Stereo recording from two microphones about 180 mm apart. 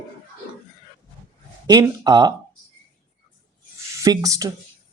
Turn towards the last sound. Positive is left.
turn(degrees=-20)  # may be behind; listen again after turning